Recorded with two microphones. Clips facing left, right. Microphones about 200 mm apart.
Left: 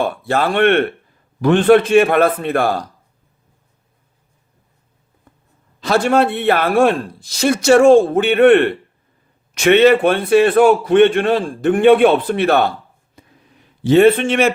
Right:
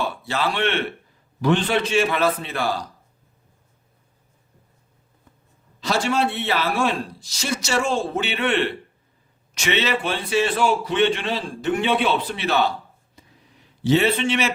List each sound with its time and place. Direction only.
0.0 s a man's voice: 55° left (ahead or behind)
5.8 s a man's voice: 55° left (ahead or behind)
13.2 s a sound: 55° left (ahead or behind)
13.8 s a man's voice: 55° left (ahead or behind)